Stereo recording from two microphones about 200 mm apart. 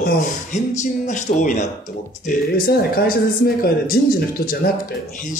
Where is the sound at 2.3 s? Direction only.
50° left (ahead or behind).